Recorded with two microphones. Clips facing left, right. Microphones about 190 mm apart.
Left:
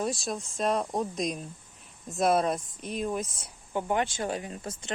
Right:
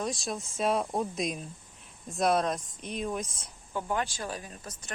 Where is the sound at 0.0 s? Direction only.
Centre (ahead or behind).